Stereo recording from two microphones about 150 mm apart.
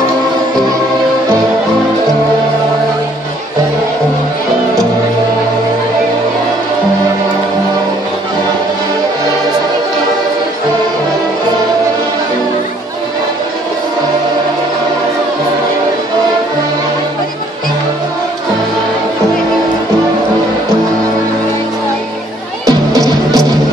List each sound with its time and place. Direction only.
22.7 s music: 25° right (ahead or behind)